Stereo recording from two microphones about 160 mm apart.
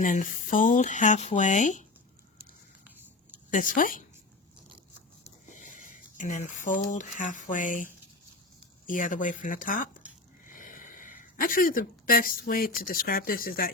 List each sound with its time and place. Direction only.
0.0 s speech: 55° left (ahead or behind)
3.5 s speech: 55° left (ahead or behind)
5.5 s speech: 55° left (ahead or behind)
8.9 s speech: 55° left (ahead or behind)